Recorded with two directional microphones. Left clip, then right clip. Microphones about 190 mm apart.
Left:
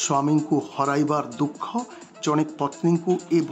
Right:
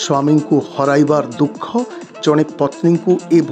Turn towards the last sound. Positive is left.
turn(degrees=-25)  # may be behind; listen again after turning